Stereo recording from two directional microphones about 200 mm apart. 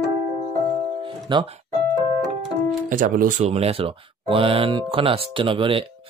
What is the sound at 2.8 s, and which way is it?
Speech, 40° right (ahead or behind).